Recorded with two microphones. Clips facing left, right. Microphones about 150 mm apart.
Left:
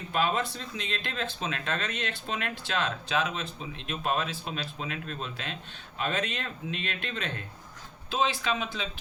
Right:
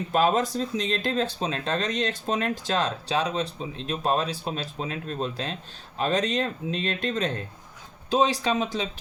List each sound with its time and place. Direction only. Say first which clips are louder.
0.1 s speech: right 6 dB; 40° right (ahead or behind)